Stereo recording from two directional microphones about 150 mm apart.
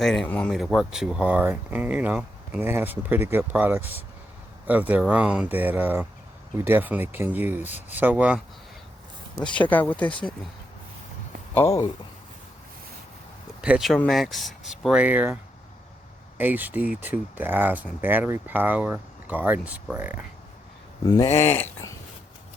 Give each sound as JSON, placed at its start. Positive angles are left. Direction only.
{"t": 0.0, "sound": "speech", "side_deg": 5}
{"t": 9.5, "sound": "speech", "side_deg": 10}
{"t": 11.5, "sound": "speech", "side_deg": 20}
{"t": 13.6, "sound": "speech", "side_deg": -5}
{"t": 16.4, "sound": "speech", "side_deg": -10}
{"t": 21.3, "sound": "speech", "side_deg": 15}